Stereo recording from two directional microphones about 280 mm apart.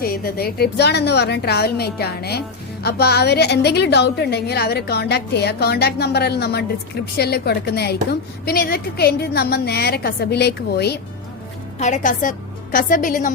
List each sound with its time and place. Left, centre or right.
0.0 s a woman's voice: left